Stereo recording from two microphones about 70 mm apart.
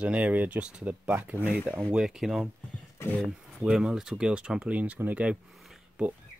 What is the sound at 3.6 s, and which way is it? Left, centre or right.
Speech, centre.